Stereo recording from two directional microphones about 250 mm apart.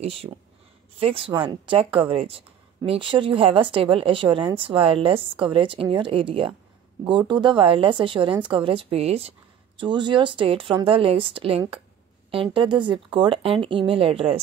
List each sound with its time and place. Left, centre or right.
0.0 s speech: right